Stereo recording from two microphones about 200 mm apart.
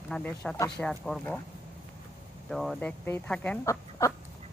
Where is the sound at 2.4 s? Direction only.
Centre (ahead or behind).